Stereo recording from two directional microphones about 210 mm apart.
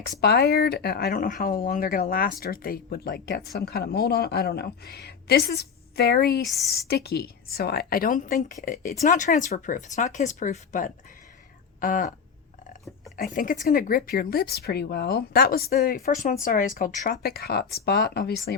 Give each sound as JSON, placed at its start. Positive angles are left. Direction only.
{"t": 0.2, "sound": "speech", "side_deg": 50}
{"t": 13.1, "sound": "speech", "side_deg": 45}